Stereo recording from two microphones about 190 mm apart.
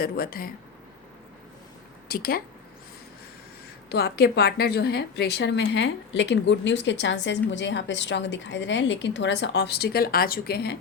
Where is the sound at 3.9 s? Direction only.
55° left (ahead or behind).